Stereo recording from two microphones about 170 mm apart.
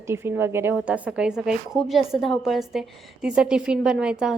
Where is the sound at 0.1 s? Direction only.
15° right (ahead or behind).